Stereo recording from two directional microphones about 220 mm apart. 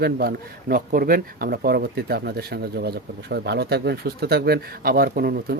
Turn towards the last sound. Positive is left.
turn(degrees=-45)  # may be behind; listen again after turning